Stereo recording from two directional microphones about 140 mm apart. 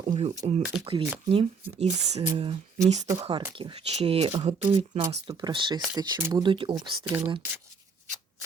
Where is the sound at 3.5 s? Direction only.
40° right (ahead or behind).